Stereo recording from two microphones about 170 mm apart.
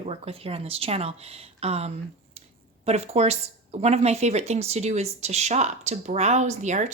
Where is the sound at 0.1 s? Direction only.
35° right (ahead or behind).